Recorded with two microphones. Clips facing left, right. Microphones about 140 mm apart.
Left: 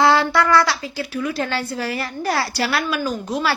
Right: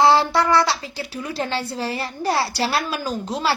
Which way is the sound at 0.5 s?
30° right (ahead or behind).